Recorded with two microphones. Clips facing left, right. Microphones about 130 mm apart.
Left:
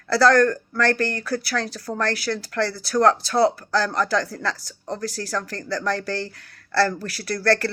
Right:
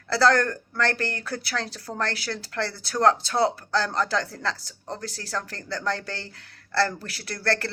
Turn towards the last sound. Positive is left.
turn(degrees=-20)  # may be behind; listen again after turning